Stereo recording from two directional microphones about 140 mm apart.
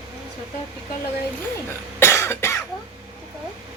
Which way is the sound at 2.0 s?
20° left (ahead or behind).